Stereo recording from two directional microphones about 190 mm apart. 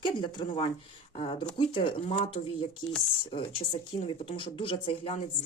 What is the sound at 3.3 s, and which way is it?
Speech, 25° left (ahead or behind).